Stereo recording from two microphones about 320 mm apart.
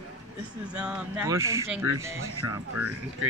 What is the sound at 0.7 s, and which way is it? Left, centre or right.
Speech, centre.